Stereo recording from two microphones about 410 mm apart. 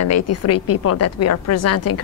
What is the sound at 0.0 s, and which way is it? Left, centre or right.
A woman's voice, left.